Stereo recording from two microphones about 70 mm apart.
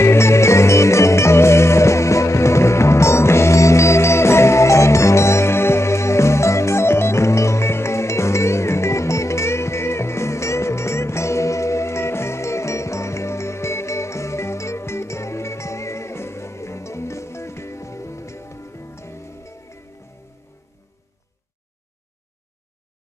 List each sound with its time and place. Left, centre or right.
0.0 s music: left